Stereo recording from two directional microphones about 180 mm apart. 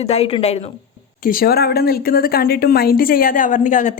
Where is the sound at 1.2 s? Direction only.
55° left (ahead or behind).